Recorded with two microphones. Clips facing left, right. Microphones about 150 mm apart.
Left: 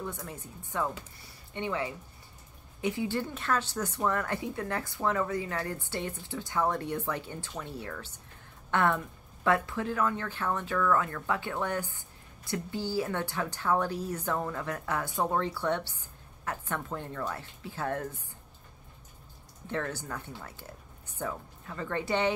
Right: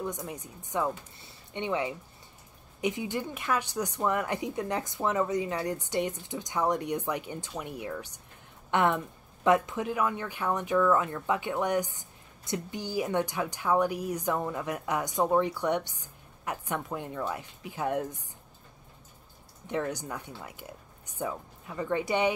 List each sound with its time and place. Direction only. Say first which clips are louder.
0.0 s speech: right 3 dB; 15° right (ahead or behind)
19.7 s speech: right 2 dB; 15° right (ahead or behind)